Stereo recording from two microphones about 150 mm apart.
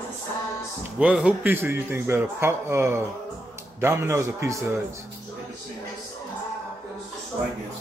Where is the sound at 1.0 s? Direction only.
5° right (ahead or behind).